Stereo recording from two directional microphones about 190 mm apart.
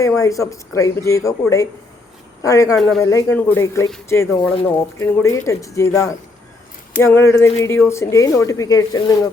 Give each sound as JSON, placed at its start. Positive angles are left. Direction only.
{"t": 0.2, "sound": "speech", "side_deg": 15}
{"t": 2.7, "sound": "a man's voice", "side_deg": 0}
{"t": 3.0, "sound": "speech", "side_deg": 15}